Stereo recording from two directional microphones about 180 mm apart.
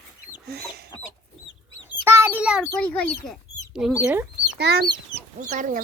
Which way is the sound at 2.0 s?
15° right (ahead or behind).